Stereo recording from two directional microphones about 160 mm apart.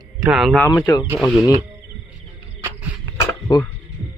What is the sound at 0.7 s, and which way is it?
Speech, 25° left (ahead or behind).